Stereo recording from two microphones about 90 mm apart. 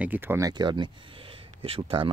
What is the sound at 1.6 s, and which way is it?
Speech, 90° right.